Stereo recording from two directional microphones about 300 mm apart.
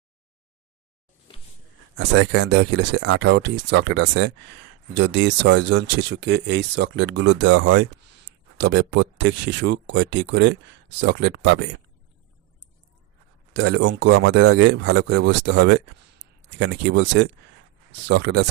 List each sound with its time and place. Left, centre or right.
2.0 s speech: right
13.6 s speech: right